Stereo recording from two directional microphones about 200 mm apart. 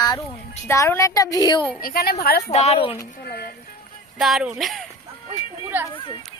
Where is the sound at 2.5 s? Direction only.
35° left (ahead or behind).